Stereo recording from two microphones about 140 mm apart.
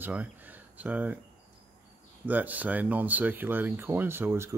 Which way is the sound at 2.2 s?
10° right (ahead or behind).